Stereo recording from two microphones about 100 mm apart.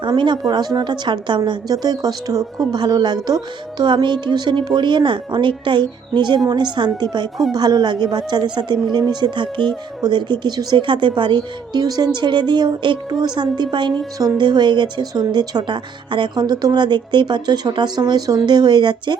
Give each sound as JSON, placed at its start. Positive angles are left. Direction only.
{"t": 0.2, "sound": "speech", "side_deg": -50}